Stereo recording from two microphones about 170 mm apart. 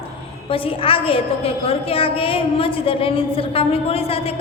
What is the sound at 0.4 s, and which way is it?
A woman's voice, 35° left (ahead or behind).